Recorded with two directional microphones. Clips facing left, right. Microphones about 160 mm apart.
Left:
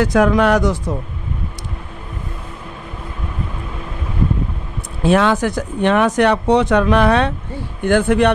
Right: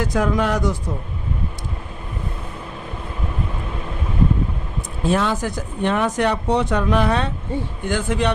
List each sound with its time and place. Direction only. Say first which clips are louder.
0.0 s speech: left 6 dB; 80° left
5.0 s speech: left 6 dB; 75° left (ahead or behind)
7.8 s speech: left 10 dB; 60° left (ahead or behind)